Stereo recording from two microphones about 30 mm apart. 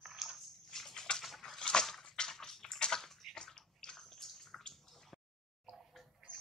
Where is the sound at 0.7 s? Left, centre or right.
Centre.